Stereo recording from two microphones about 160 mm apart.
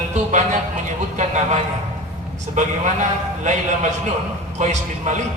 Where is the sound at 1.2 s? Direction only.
45° right (ahead or behind).